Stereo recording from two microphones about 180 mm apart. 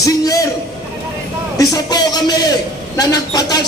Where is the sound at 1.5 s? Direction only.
20° left (ahead or behind).